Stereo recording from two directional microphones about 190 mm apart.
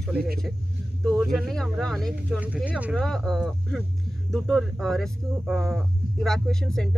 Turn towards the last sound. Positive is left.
turn(degrees=5)  # may be behind; listen again after turning